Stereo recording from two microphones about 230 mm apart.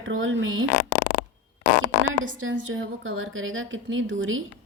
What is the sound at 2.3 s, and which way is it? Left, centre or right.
A woman's voice, right.